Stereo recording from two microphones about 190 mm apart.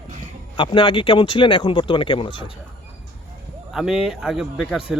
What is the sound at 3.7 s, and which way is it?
Speech, 5° right (ahead or behind).